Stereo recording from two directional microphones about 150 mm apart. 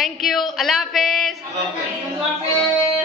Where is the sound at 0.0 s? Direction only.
Centre (ahead or behind).